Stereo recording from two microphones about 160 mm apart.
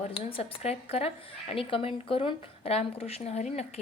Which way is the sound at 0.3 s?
35° left (ahead or behind).